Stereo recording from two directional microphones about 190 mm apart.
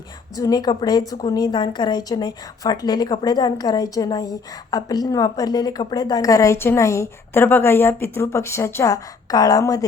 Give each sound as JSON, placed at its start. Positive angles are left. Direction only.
{"t": 0.3, "sound": "a woman's voice", "side_deg": 20}